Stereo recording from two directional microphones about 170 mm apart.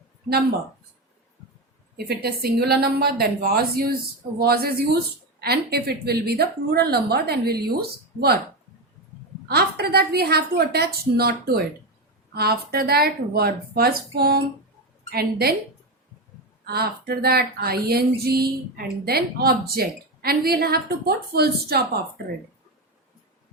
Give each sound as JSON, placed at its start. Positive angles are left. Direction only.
{"t": 2.0, "sound": "a woman's voice", "side_deg": -70}
{"t": 9.5, "sound": "a woman's voice", "side_deg": -65}
{"t": 16.6, "sound": "speech", "side_deg": -65}